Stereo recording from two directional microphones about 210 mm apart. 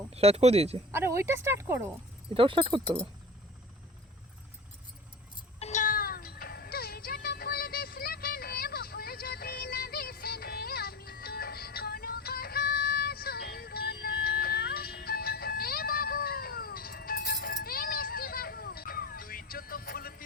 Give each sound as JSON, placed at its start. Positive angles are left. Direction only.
{"t": 0.1, "sound": "speech", "side_deg": -30}
{"t": 0.9, "sound": "speech", "side_deg": -10}
{"t": 2.3, "sound": "speech", "side_deg": -25}
{"t": 5.5, "sound": "music", "side_deg": 35}